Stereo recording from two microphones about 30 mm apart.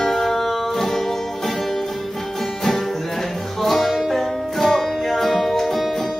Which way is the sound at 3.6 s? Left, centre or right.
Centre.